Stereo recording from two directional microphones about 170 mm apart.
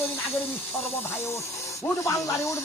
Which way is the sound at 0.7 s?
15° left (ahead or behind).